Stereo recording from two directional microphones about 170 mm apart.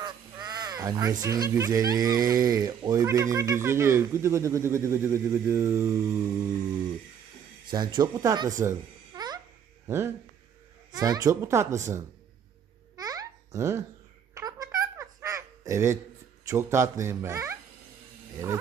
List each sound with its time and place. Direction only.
0.0 s crow: 25° right (ahead or behind)
1.2 s speech: 20° right (ahead or behind)
7.7 s a child's voice: 25° right (ahead or behind)
12.9 s babbling: 20° right (ahead or behind)
14.3 s a sound: 20° right (ahead or behind)
16.4 s speech: 15° right (ahead or behind)